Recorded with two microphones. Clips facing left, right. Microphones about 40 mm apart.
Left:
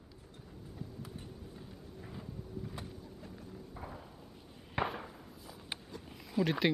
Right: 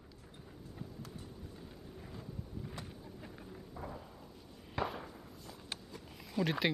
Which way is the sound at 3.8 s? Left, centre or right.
Left.